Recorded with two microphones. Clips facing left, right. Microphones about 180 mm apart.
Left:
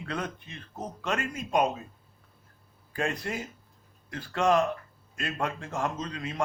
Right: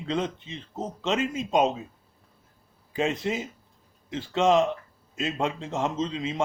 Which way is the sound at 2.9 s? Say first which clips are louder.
Right 5 dB; 20° right (ahead or behind).